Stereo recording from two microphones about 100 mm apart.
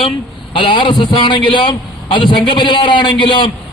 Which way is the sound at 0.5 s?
55° left (ahead or behind).